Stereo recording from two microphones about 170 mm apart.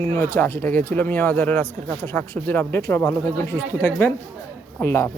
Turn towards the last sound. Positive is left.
turn(degrees=15)  # may be behind; listen again after turning